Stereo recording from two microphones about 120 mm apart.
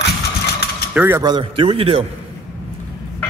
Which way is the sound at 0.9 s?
15° right (ahead or behind).